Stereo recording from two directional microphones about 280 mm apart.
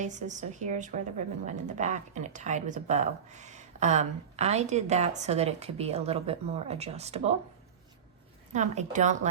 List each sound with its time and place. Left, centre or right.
0.0 s a woman's voice: right
8.5 s a woman's voice: right